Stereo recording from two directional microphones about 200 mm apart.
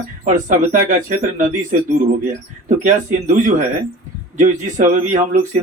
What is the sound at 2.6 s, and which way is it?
Speech, 40° right (ahead or behind).